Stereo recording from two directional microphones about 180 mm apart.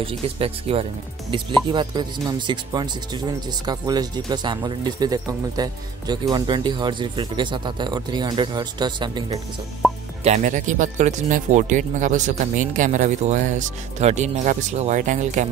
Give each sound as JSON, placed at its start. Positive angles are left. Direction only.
{"t": 0.0, "sound": "speech", "side_deg": -30}
{"t": 10.2, "sound": "speech", "side_deg": -40}